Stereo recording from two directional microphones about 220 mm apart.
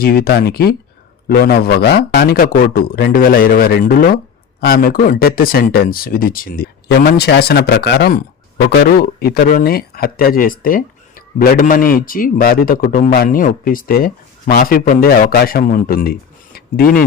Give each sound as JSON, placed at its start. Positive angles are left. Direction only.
{"t": 0.0, "sound": "a man's voice", "side_deg": 45}